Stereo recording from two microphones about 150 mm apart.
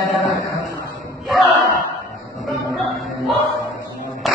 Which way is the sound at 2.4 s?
Centre (ahead or behind).